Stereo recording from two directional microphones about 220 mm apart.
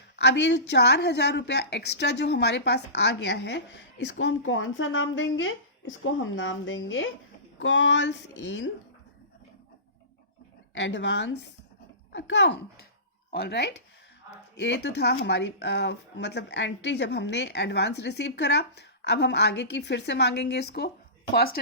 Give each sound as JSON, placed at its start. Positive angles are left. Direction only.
{"t": 0.2, "sound": "speech", "side_deg": 50}
{"t": 10.8, "sound": "speech", "side_deg": 55}